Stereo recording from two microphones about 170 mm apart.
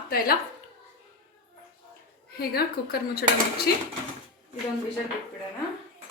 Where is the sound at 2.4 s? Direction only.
65° left (ahead or behind).